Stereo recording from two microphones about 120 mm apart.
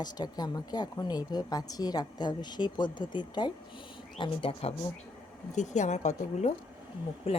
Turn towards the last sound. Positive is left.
turn(degrees=55)  # may be behind; listen again after turning